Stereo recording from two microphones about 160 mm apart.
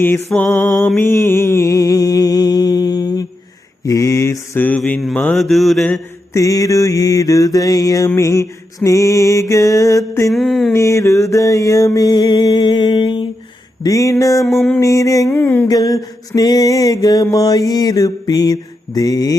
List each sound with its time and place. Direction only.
0.0 s a sound: 15° left (ahead or behind)
0.9 s mantra: 15° left (ahead or behind)
3.8 s a sound: 20° left (ahead or behind)
4.8 s mantra: centre (ahead or behind)
6.3 s mantra: 20° left (ahead or behind)
10.3 s mantra: centre (ahead or behind)
10.7 s mantra: 20° left (ahead or behind)
13.8 s a sound: 20° left (ahead or behind)
15.6 s mantra: 25° left (ahead or behind)